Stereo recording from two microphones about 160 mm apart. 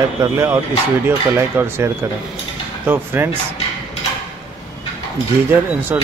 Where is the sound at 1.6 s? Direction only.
10° right (ahead or behind).